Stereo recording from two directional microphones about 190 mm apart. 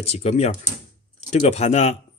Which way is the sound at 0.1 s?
35° left (ahead or behind).